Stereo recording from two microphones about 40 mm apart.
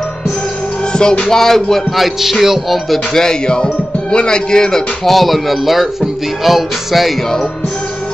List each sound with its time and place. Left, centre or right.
1.3 s music: centre
2.0 s music: centre
3.2 s music: centre
5.1 s music: centre